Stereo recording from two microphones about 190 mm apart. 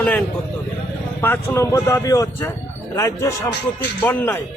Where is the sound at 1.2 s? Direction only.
10° left (ahead or behind).